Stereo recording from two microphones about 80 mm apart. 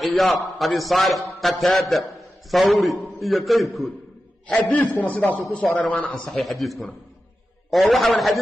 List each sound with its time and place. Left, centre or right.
0.0 s a man's voice: centre
4.5 s a man's voice: centre
6.2 s a man's voice: centre